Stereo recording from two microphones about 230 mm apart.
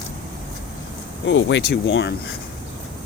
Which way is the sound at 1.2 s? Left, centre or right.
Left.